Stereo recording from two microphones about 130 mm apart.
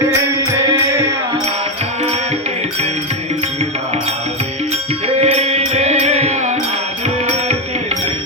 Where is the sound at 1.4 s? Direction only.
55° right (ahead or behind).